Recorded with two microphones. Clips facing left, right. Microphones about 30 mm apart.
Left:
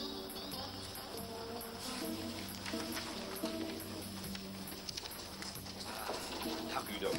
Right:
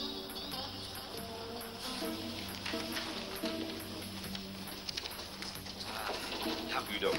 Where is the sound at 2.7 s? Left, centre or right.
Right.